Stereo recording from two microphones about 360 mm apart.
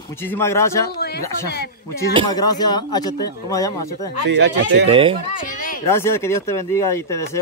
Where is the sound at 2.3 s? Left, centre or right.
Centre.